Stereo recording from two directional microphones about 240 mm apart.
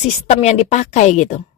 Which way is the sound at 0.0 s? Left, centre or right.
Left.